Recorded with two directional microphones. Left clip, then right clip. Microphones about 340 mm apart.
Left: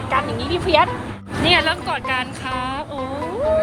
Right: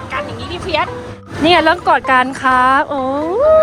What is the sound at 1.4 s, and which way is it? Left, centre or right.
Speech, centre.